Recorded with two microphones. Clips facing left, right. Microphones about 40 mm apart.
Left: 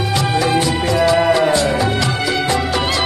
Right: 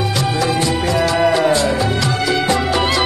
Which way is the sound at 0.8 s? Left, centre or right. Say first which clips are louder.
Left 2 dB; centre.